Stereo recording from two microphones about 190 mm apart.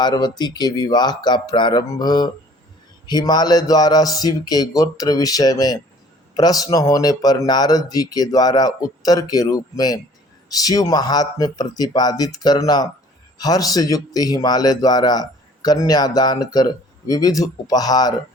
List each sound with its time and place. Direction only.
0.0 s a man's voice: 20° left (ahead or behind)